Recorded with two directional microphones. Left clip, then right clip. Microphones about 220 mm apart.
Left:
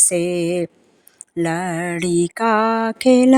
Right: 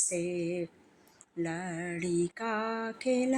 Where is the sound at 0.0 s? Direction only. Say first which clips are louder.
Left 14 dB; 50° left (ahead or behind).